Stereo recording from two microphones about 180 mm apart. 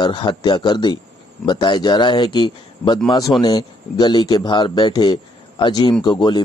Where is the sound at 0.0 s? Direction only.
25° left (ahead or behind).